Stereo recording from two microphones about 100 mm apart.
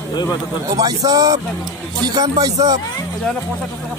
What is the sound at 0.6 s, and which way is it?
Speech, 40° right (ahead or behind).